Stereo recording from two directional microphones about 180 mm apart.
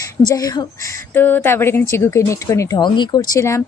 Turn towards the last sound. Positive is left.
turn(degrees=15)  # may be behind; listen again after turning